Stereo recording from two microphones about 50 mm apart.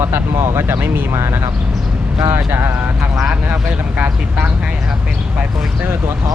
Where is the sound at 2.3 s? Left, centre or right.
Right.